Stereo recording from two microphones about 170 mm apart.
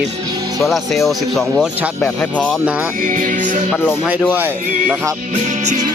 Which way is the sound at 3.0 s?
50° right (ahead or behind).